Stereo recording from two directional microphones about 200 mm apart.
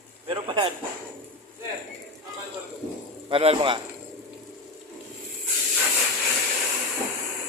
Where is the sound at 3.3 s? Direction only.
30° right (ahead or behind).